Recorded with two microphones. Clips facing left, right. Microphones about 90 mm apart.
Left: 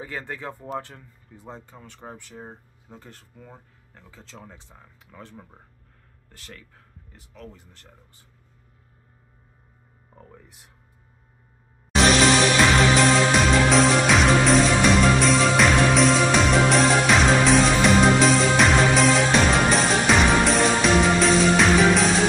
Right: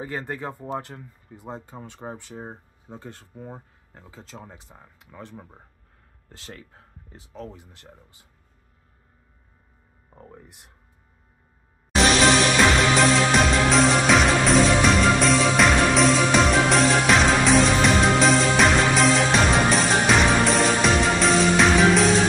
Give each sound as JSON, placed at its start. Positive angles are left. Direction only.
{"t": 0.0, "sound": "speech", "side_deg": -5}
{"t": 1.9, "sound": "speech", "side_deg": -20}
{"t": 4.3, "sound": "speech", "side_deg": -10}
{"t": 6.2, "sound": "speech", "side_deg": -25}
{"t": 12.5, "sound": "music", "side_deg": 0}